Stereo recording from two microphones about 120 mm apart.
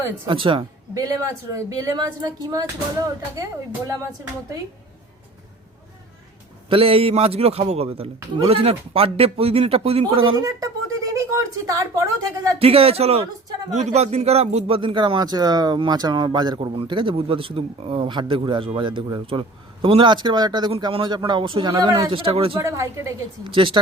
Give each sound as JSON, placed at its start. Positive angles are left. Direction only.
{"t": 0.3, "sound": "a man's voice", "side_deg": -45}
{"t": 0.9, "sound": "speech", "side_deg": -30}
{"t": 6.7, "sound": "a man's voice", "side_deg": -50}
{"t": 10.3, "sound": "speech", "side_deg": -25}
{"t": 12.5, "sound": "speech", "side_deg": -55}
{"t": 14.8, "sound": "a man's voice", "side_deg": -45}
{"t": 21.7, "sound": "speech", "side_deg": -30}
{"t": 22.1, "sound": "a man's voice", "side_deg": -50}
{"t": 22.5, "sound": "speech", "side_deg": -25}
{"t": 23.4, "sound": "a man's voice", "side_deg": -45}